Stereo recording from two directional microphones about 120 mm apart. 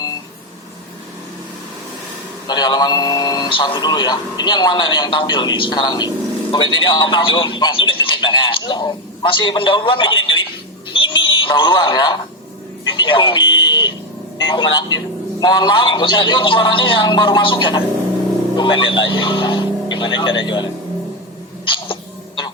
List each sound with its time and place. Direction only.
2.5 s a man's voice: 35° left (ahead or behind)
10.9 s radio: 45° left (ahead or behind)
12.9 s alarm: 45° left (ahead or behind)
14.3 s a man's voice: 45° left (ahead or behind)
21.6 s cat: 45° left (ahead or behind)